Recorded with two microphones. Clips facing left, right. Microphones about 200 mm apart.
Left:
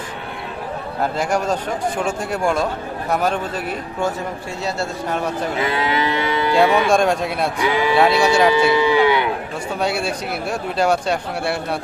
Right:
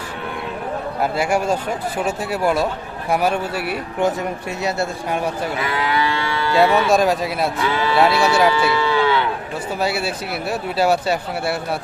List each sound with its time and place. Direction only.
1.2 s speech: 10° right (ahead or behind)
5.6 s livestock: 20° left (ahead or behind)
6.7 s speech: 15° left (ahead or behind)
6.9 s speech: centre (ahead or behind)
7.6 s speech: 15° left (ahead or behind)
7.9 s speech: centre (ahead or behind)
8.5 s cattle: 15° left (ahead or behind)
9.8 s speech: 5° right (ahead or behind)